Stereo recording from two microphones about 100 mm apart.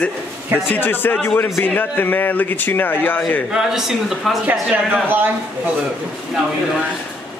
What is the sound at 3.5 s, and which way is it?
Speech, 5° right (ahead or behind).